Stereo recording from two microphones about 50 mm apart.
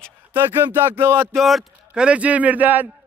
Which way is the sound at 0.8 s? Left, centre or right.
Right.